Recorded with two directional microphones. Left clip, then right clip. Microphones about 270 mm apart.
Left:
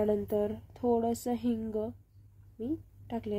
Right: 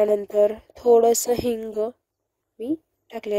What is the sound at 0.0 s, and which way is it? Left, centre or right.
Speech, right.